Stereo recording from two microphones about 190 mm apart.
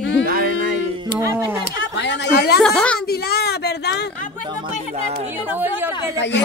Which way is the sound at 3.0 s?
55° left (ahead or behind).